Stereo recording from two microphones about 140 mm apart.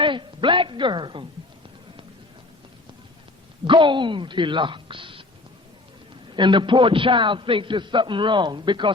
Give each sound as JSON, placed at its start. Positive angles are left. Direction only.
{"t": 0.0, "sound": "a woman's voice", "side_deg": -35}
{"t": 3.6, "sound": "a man's voice", "side_deg": -35}
{"t": 6.3, "sound": "a man's voice", "side_deg": -35}